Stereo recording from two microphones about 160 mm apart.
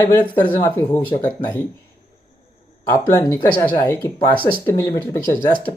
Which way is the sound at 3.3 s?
30° left (ahead or behind).